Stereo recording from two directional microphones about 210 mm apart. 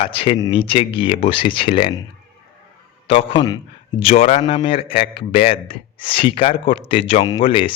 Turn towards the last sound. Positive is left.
turn(degrees=25)  # may be behind; listen again after turning